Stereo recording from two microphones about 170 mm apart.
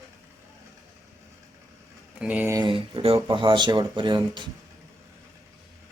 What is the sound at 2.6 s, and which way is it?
Speech, 30° right (ahead or behind).